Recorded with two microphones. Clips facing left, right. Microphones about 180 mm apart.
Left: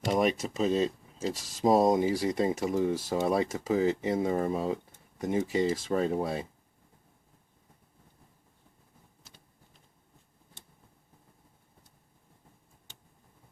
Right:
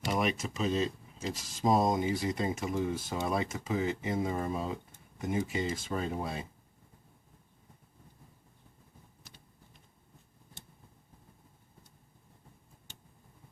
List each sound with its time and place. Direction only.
0.1 s speech: 35° left (ahead or behind)